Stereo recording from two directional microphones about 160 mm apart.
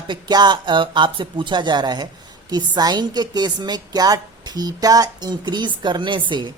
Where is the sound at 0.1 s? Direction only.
25° right (ahead or behind).